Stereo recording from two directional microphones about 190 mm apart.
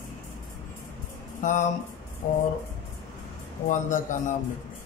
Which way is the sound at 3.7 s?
40° left (ahead or behind).